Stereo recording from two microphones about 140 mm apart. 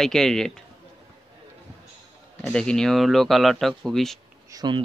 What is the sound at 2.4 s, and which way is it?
Speech, 5° left (ahead or behind).